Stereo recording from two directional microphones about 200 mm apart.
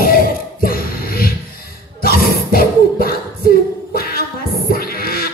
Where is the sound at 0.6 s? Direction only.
45° left (ahead or behind).